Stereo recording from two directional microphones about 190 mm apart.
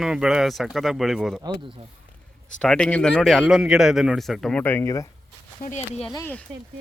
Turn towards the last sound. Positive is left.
turn(degrees=10)  # may be behind; listen again after turning